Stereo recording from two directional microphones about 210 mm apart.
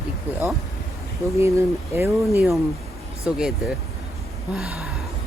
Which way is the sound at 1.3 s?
15° right (ahead or behind).